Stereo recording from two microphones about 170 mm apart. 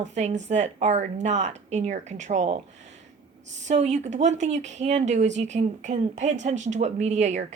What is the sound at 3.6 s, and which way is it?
Speech, 40° right (ahead or behind).